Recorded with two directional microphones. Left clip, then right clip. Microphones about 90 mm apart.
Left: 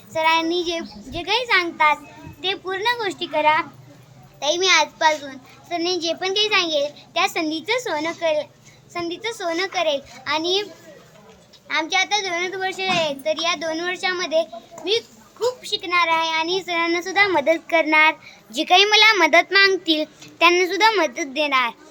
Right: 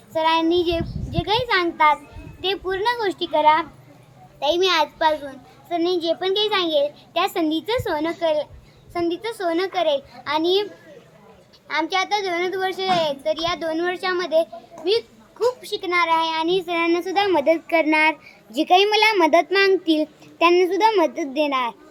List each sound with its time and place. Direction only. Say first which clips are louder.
0.1 s a child's voice: even; 5° right (ahead or behind)
11.7 s a child's voice: left 1 dB; 10° right (ahead or behind)
15.6 s a child's voice: left 1 dB; 10° right (ahead or behind)
17.7 s a child's voice: left 5 dB; 20° right (ahead or behind)